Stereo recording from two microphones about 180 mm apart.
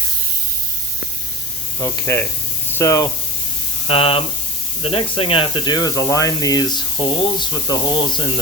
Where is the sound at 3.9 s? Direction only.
30° left (ahead or behind).